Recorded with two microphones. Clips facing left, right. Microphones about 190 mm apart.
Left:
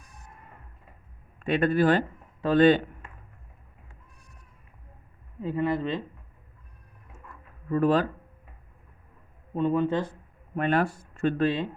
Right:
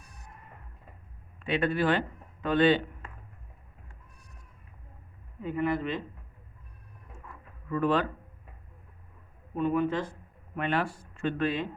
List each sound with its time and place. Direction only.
1.4 s speech: 45° left (ahead or behind)
5.4 s speech: 30° left (ahead or behind)
7.7 s speech: 40° left (ahead or behind)
9.6 s speech: 25° left (ahead or behind)
10.5 s speech: 40° left (ahead or behind)